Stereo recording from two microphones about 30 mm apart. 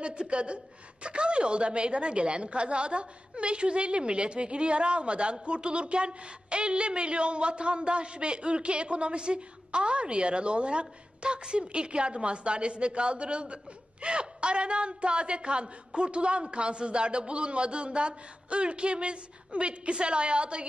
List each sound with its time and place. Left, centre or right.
0.0 s a woman's voice: right